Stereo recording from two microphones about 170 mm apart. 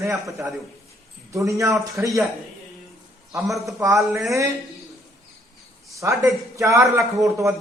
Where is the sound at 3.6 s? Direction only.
20° right (ahead or behind).